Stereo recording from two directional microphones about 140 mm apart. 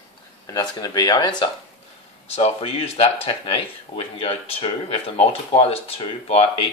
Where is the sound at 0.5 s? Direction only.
25° left (ahead or behind).